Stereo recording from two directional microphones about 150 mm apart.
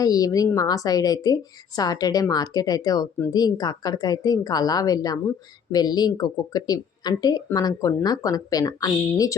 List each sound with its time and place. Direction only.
0.0 s a woman's voice: 25° left (ahead or behind)